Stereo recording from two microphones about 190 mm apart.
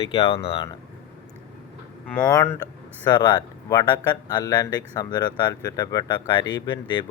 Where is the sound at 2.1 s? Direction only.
10° left (ahead or behind).